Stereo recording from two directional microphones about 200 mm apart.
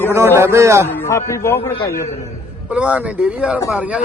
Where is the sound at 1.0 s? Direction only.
15° left (ahead or behind).